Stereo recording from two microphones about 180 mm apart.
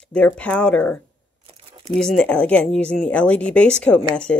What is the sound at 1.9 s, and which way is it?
Speech, 5° left (ahead or behind).